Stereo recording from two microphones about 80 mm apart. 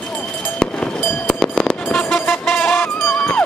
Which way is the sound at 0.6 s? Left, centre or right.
Centre.